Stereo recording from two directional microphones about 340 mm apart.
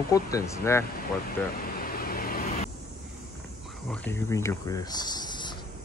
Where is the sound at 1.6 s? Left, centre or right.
Left.